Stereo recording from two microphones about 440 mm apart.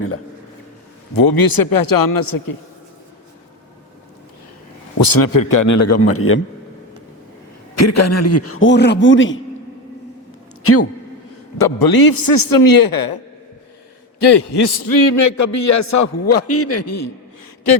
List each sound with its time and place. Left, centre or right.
1.1 s a man's voice: left
4.9 s a man's voice: left
7.8 s a man's voice: left
10.6 s a man's voice: left
11.5 s a man's voice: left
14.2 s a man's voice: left